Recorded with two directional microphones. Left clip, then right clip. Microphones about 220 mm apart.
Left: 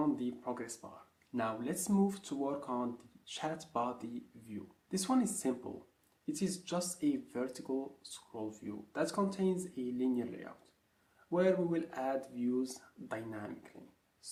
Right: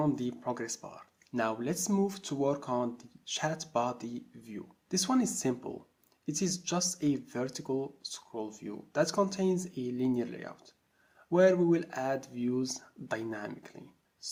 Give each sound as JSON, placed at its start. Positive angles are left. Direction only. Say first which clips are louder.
{"t": 0.0, "sound": "speech", "louder": "right 4 dB", "side_deg": -40}